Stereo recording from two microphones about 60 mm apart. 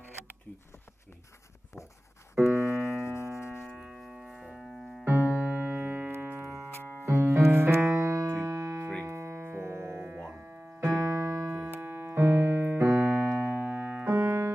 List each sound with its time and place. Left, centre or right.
2.4 s music: left
3.7 s keyboard: centre
5.0 s piano: right
6.7 s music: left
7.1 s music: right
7.9 s music: right
11.1 s music: right
11.8 s keyboard: right
13.6 s piano: right